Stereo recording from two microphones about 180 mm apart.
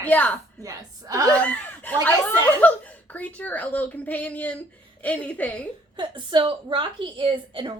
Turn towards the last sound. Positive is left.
turn(degrees=-30)  # may be behind; listen again after turning